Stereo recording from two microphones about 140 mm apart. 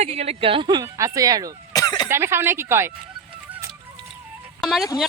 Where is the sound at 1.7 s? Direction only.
25° left (ahead or behind).